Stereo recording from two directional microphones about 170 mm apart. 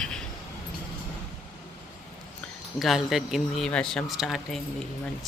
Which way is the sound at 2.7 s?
Centre (ahead or behind).